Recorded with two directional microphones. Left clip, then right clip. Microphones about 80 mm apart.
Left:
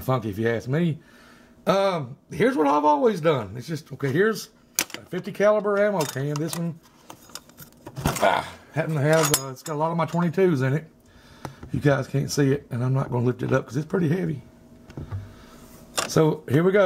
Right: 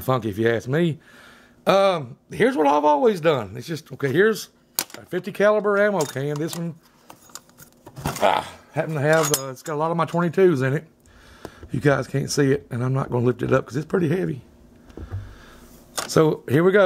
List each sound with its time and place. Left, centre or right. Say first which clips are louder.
0.0 s a man's voice: right 4 dB; right
4.8 s camera: left 2 dB; centre
5.1 s a man's voice: right 2 dB; right
5.6 s mechanisms: right 2 dB; right
7.1 s a sound: left 1 dB; centre
8.2 s speech: right 2 dB; right
9.1 s cutlery: right 1 dB; centre
9.7 s a man's voice: right 2 dB; right
16.1 s a man's voice: right 3 dB; right